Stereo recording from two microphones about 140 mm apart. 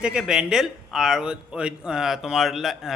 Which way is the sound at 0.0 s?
5° right (ahead or behind).